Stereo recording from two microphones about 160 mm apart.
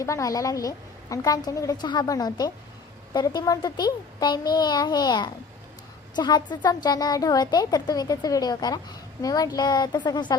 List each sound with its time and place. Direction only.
0.0 s a woman's voice: 20° left (ahead or behind)